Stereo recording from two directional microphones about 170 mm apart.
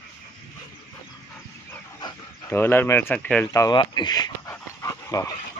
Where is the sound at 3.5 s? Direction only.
25° left (ahead or behind).